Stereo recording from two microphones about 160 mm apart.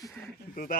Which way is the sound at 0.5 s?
65° left (ahead or behind).